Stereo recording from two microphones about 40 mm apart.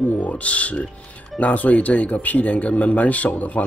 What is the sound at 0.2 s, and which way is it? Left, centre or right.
Speech, left.